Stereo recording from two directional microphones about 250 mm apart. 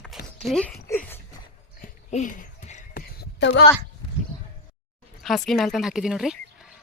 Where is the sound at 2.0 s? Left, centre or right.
Left.